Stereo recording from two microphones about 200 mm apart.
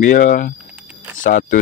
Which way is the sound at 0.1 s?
40° left (ahead or behind).